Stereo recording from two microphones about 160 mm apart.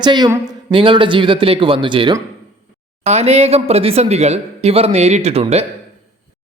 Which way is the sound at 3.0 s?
40° right (ahead or behind).